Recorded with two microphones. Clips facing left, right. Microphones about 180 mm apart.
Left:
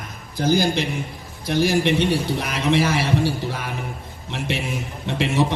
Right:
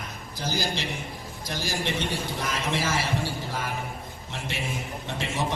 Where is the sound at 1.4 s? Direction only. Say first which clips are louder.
Left 12 dB; 65° left (ahead or behind).